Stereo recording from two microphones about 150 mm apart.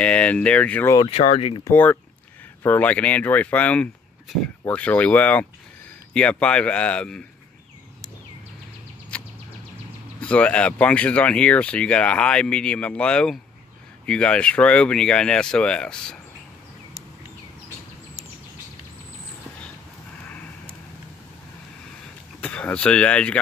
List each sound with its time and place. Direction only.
0.0 s speech: 10° left (ahead or behind)
0.9 s speech: 40° left (ahead or behind)
1.6 s speech: 15° left (ahead or behind)
9.1 s a sound: 10° left (ahead or behind)
10.2 s speech: 10° left (ahead or behind)
22.4 s speech: 10° left (ahead or behind)